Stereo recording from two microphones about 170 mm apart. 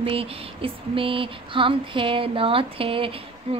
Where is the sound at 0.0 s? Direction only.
35° right (ahead or behind).